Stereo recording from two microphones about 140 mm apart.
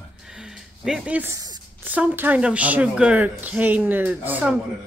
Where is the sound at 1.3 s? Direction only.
25° right (ahead or behind).